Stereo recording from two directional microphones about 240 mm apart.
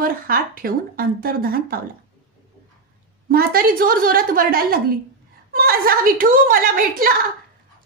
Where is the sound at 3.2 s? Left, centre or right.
Right.